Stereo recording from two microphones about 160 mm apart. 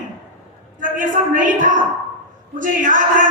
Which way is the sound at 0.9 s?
55° right (ahead or behind).